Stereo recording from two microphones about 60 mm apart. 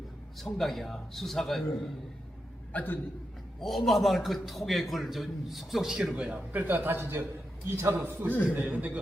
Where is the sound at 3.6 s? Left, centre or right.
Centre.